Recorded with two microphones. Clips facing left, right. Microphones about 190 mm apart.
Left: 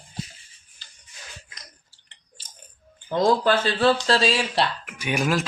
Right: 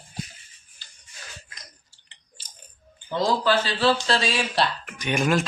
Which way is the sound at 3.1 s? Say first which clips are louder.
Left 3 dB; 50° left (ahead or behind).